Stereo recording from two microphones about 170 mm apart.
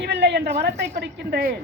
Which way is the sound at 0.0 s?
85° right.